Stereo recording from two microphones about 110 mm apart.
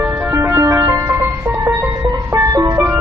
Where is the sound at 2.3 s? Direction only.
30° right (ahead or behind).